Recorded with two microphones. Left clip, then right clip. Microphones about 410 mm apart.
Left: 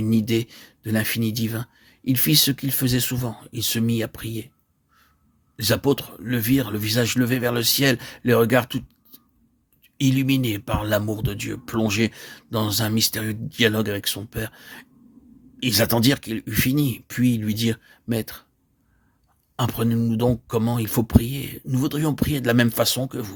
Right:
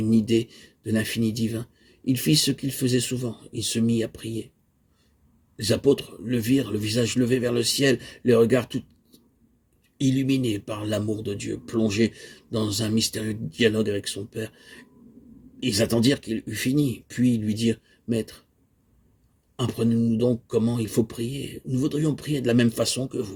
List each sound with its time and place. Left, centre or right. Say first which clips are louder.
0.0 s speech: even; left
5.5 s speech: even; left
19.5 s speech: left 1 dB; left